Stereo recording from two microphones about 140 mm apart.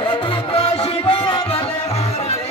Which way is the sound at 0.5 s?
45° left (ahead or behind).